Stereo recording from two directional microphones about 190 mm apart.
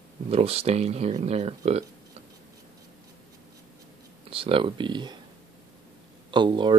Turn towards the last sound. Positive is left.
turn(degrees=-25)  # may be behind; listen again after turning